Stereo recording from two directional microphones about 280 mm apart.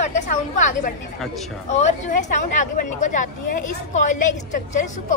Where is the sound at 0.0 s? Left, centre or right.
Left.